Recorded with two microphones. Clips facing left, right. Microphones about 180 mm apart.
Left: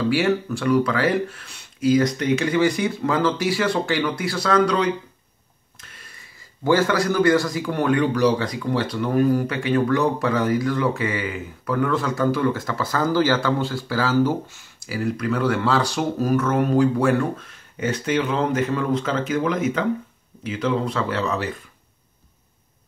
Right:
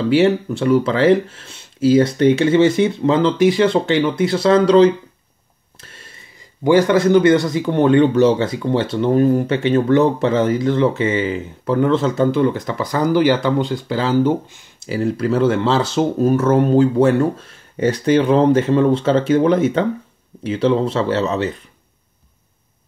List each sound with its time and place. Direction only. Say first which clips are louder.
0.1 s speech: right 6 dB; 20° right (ahead or behind)
6.6 s speech: right 6 dB; 15° right (ahead or behind)